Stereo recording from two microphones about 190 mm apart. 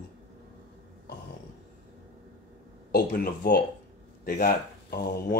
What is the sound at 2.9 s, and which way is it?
Speech, 55° left (ahead or behind).